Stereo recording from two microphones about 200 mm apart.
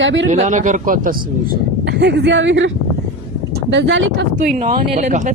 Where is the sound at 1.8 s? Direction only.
60° right (ahead or behind).